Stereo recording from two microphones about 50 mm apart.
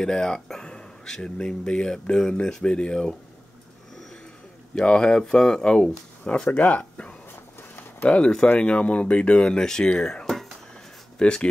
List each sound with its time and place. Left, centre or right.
0.0 s speech: centre
4.7 s speech: centre
6.8 s a sound: left
8.5 s speech: left